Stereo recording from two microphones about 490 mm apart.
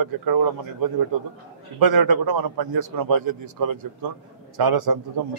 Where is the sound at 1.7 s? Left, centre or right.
Right.